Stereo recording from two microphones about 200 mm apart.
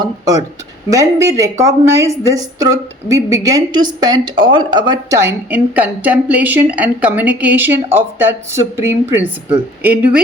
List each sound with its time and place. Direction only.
0.0 s speech: 15° right (ahead or behind)